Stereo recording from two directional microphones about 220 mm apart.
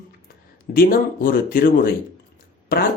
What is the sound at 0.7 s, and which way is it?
Speech, 40° left (ahead or behind).